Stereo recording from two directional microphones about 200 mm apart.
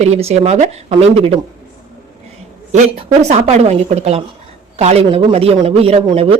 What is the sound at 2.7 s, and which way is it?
A woman's voice, 35° right (ahead or behind).